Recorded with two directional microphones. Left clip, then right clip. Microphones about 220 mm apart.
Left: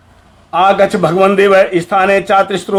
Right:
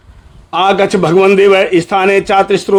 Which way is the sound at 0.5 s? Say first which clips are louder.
Left 1 dB; 35° right (ahead or behind).